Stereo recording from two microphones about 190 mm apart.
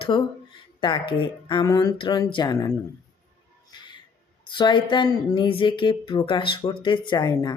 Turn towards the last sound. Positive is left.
turn(degrees=20)  # may be behind; listen again after turning